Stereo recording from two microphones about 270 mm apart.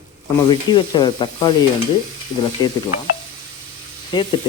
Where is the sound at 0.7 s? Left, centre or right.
Centre.